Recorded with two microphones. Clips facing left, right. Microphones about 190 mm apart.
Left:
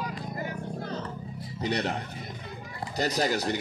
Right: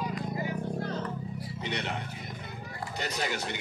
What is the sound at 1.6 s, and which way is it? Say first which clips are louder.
Speech: left 6 dB; 40° left (ahead or behind).